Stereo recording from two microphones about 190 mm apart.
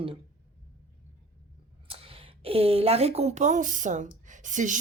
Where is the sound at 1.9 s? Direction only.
30° right (ahead or behind).